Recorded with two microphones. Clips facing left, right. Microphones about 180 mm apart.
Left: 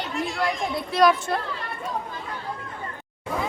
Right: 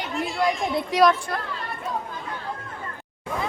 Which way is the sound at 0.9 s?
15° right (ahead or behind).